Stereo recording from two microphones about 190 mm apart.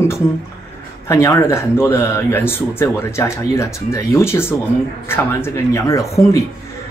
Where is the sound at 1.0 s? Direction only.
15° left (ahead or behind).